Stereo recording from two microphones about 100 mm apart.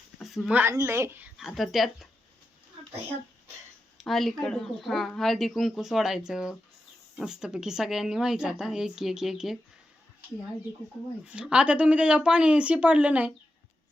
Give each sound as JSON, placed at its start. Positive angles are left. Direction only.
{"t": 0.2, "sound": "a sound", "side_deg": 0}
{"t": 0.7, "sound": "speech", "side_deg": -30}
{"t": 1.4, "sound": "speech", "side_deg": 0}
{"t": 4.0, "sound": "speech", "side_deg": 0}
{"t": 11.3, "sound": "speech", "side_deg": -10}